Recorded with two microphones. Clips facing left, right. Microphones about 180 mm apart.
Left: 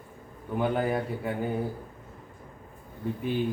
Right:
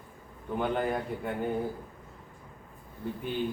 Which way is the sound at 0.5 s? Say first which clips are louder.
Left 3 dB; 5° left (ahead or behind).